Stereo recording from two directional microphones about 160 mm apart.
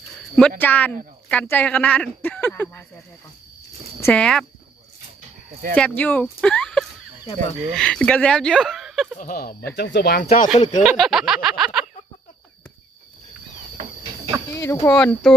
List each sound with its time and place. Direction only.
0.6 s speech: 10° left (ahead or behind)
4.0 s speech: 5° left (ahead or behind)
5.7 s speech: 10° left (ahead or behind)
9.1 s speech: 60° left (ahead or behind); by 10.2 s 90° left
10.2 s speech: 45° left (ahead or behind)
10.8 s speech: centre (ahead or behind)
14.5 s speech: 20° left (ahead or behind)
14.9 s speech: 5° left (ahead or behind)